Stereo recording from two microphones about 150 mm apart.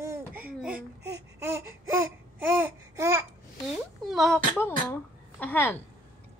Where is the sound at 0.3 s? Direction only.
10° right (ahead or behind).